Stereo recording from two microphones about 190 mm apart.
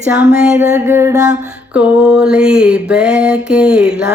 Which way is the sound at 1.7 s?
5° right (ahead or behind).